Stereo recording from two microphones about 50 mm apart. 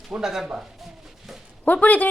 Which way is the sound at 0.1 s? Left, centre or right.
Centre.